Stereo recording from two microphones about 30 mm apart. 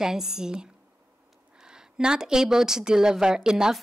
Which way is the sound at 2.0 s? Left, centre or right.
Right.